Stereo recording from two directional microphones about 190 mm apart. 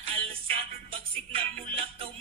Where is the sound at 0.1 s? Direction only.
30° right (ahead or behind).